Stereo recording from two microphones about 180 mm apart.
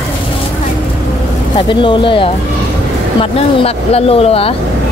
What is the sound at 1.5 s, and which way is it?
Speech, 25° left (ahead or behind).